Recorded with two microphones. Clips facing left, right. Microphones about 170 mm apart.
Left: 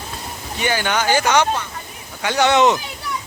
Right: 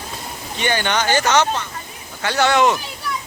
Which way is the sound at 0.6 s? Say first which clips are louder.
Even; 5° left (ahead or behind).